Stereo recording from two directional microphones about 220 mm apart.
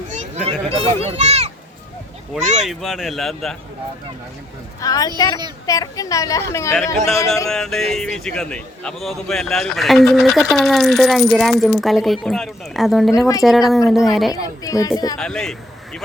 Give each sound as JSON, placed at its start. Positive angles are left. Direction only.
{"t": 0.1, "sound": "a child's voice", "side_deg": -30}
{"t": 2.3, "sound": "a man's voice", "side_deg": 0}
{"t": 4.8, "sound": "a woman's voice", "side_deg": 15}
{"t": 7.5, "sound": "a man's voice", "side_deg": 0}
{"t": 13.1, "sound": "a woman's voice", "side_deg": 15}
{"t": 13.4, "sound": "a man's voice", "side_deg": 0}
{"t": 14.6, "sound": "a woman's voice", "side_deg": 15}
{"t": 15.2, "sound": "a man's voice", "side_deg": 0}